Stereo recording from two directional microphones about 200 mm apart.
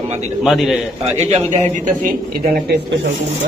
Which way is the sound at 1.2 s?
35° right (ahead or behind).